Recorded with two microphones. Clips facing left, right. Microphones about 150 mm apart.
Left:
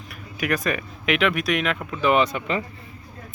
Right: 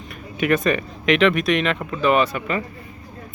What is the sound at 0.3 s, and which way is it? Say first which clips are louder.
Speech: right 5 dB; centre (ahead or behind).